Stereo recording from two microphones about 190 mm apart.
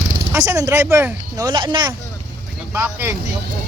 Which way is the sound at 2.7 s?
10° right (ahead or behind).